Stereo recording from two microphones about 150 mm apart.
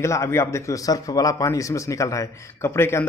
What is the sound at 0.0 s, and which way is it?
Speech, 20° left (ahead or behind).